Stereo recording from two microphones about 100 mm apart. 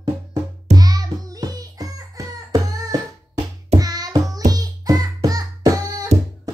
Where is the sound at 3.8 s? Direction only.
40° right (ahead or behind).